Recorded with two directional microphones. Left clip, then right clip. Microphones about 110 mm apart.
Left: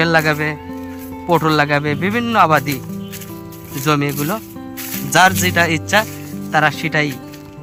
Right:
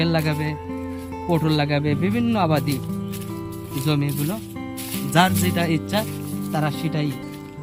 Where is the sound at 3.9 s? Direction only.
85° left.